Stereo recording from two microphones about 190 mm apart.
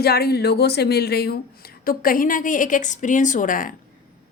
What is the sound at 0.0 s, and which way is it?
A woman's voice, 55° left (ahead or behind).